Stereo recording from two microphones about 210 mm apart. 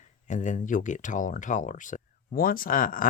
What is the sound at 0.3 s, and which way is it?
Speech, 35° left (ahead or behind).